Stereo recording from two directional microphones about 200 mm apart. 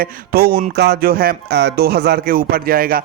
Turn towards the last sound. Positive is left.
turn(degrees=-45)  # may be behind; listen again after turning